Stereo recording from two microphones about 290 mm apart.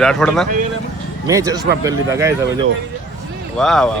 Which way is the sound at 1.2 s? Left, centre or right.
Centre.